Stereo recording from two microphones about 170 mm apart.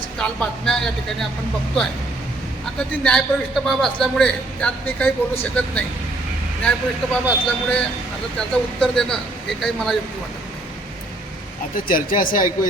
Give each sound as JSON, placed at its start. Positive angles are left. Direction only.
{"t": 0.2, "sound": "a man's voice", "side_deg": 5}
{"t": 3.0, "sound": "a man's voice", "side_deg": 5}
{"t": 11.9, "sound": "speech", "side_deg": 55}